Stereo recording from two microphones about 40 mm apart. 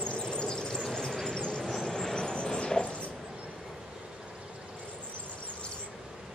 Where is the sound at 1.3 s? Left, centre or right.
Centre.